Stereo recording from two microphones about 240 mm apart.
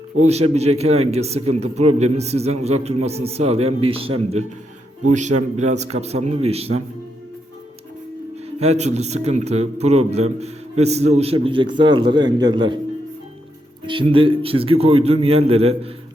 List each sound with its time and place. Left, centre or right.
0.2 s a man's voice: right
8.5 s a man's voice: right
13.8 s a man's voice: right